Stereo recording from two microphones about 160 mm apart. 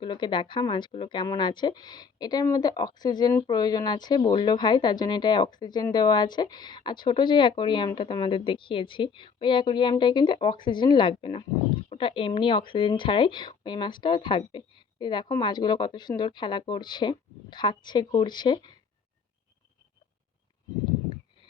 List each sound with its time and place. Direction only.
0.0 s speech: 30° left (ahead or behind)